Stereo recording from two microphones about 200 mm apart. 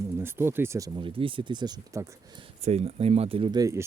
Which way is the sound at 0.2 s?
10° right (ahead or behind).